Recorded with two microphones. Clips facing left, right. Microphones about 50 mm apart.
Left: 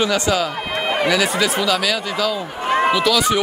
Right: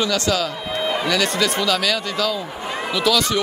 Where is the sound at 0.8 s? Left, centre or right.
Left.